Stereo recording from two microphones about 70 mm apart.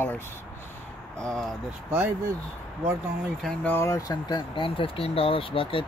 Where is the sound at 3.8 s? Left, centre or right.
Left.